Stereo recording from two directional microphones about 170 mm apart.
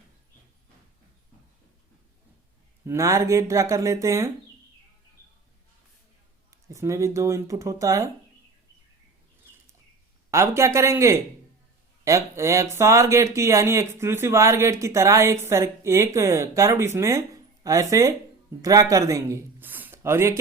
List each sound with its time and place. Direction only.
2.8 s speech: 15° right (ahead or behind)
6.7 s speech: 15° right (ahead or behind)
10.3 s speech: 15° right (ahead or behind)